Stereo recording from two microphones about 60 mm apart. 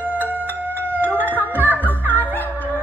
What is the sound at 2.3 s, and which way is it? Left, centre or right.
Music, left.